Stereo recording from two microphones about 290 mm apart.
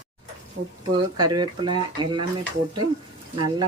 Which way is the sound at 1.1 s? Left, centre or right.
Centre.